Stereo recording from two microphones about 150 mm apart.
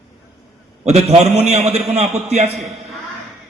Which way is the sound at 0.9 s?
45° right (ahead or behind).